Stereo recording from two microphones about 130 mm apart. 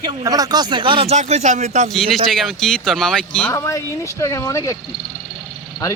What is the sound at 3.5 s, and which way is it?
Speech, 25° left (ahead or behind).